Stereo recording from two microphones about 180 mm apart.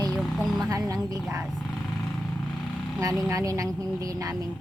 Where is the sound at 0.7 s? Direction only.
20° right (ahead or behind).